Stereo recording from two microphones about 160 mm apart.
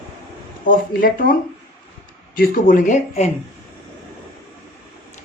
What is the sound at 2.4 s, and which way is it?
Speech, 60° left (ahead or behind).